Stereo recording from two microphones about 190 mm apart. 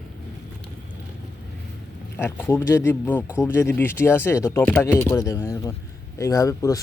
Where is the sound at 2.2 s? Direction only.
10° left (ahead or behind).